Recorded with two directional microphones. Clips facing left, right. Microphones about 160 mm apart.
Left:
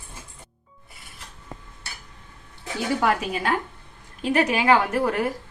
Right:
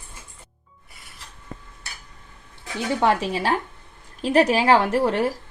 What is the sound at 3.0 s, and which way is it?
A woman's voice, 30° right (ahead or behind).